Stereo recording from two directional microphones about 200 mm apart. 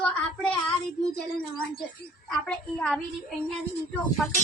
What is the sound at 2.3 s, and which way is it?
Speech, centre (ahead or behind).